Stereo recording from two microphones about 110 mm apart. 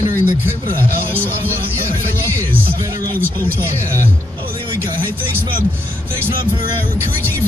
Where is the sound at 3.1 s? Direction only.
15° left (ahead or behind).